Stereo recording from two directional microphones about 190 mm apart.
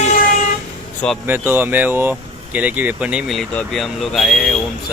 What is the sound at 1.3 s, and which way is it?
Speech, 10° right (ahead or behind).